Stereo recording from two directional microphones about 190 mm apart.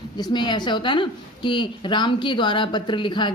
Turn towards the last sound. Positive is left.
turn(degrees=25)  # may be behind; listen again after turning